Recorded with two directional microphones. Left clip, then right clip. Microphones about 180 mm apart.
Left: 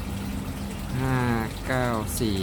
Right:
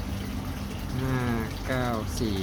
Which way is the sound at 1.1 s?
15° left (ahead or behind).